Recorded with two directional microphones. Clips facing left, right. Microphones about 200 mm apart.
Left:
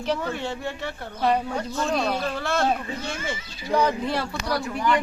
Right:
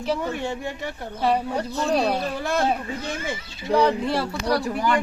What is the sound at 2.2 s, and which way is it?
Speech, 15° right (ahead or behind).